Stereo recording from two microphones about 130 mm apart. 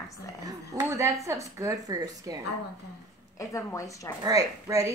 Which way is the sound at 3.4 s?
25° left (ahead or behind).